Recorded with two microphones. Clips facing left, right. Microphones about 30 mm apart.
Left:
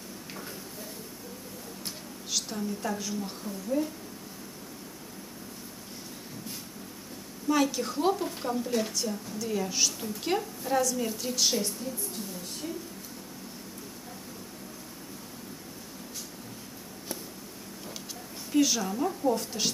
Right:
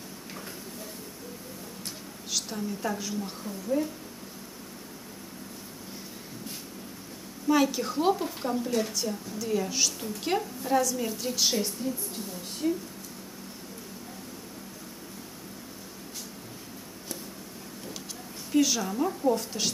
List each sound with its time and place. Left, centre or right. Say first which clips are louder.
2.3 s a woman's voice: even; centre
7.4 s a woman's voice: right 2 dB; centre
18.5 s a woman's voice: right 1 dB; centre